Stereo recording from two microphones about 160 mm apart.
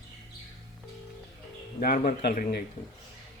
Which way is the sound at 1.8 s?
65° left (ahead or behind).